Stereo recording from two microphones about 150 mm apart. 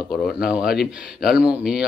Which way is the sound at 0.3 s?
5° right (ahead or behind).